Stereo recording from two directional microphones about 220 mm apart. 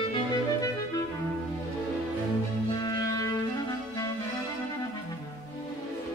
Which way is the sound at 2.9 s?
15° left (ahead or behind).